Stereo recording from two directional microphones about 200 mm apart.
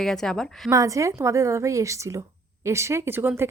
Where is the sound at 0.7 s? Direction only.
15° right (ahead or behind).